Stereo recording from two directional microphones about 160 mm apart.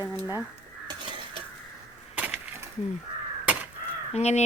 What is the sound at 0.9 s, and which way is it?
Crow, 30° right (ahead or behind).